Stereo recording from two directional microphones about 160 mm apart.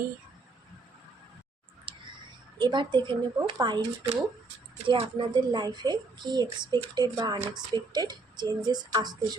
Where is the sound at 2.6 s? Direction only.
30° right (ahead or behind).